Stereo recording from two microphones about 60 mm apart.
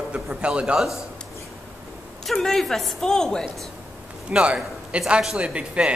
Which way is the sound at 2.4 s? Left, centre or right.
Centre.